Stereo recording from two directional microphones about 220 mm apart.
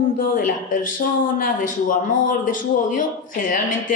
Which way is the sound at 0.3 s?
40° left (ahead or behind).